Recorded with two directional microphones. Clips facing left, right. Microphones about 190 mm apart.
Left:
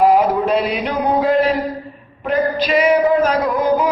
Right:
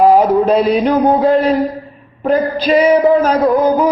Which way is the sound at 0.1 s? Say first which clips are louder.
Right 4 dB; 35° right (ahead or behind).